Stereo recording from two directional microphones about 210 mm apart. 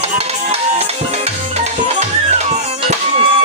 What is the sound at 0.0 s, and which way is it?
Music, 30° right (ahead or behind).